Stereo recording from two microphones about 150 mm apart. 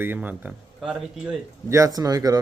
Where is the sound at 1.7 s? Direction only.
20° right (ahead or behind).